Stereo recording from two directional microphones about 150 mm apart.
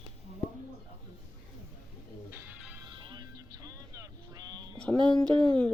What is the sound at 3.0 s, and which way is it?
Music, 30° right (ahead or behind).